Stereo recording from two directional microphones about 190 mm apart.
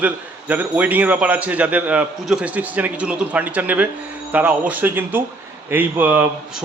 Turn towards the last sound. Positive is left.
turn(degrees=-10)  # may be behind; listen again after turning